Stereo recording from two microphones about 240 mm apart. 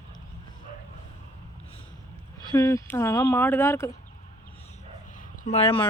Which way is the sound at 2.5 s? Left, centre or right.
Centre.